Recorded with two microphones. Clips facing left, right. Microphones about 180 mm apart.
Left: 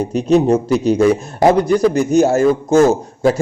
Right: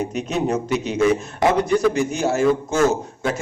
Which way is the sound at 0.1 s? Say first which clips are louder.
Left 9 dB; 35° left (ahead or behind).